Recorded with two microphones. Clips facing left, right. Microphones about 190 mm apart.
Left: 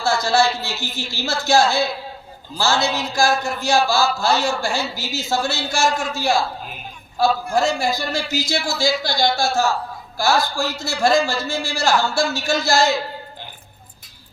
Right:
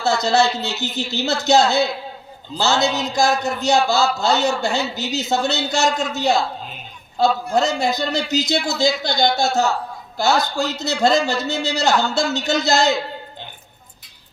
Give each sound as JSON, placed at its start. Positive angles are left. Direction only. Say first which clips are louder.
{"t": 0.0, "sound": "a man's voice", "louder": "right 1 dB", "side_deg": -20}